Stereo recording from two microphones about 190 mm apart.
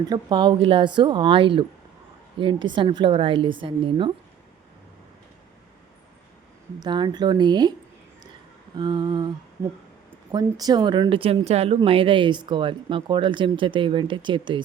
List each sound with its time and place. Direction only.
0.1 s speech: 25° right (ahead or behind)
6.7 s speech: 25° right (ahead or behind)
8.7 s speech: 20° right (ahead or behind)
10.3 s speech: 20° right (ahead or behind)